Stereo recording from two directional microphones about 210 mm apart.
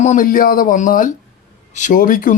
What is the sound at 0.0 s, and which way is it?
Speech, 35° left (ahead or behind).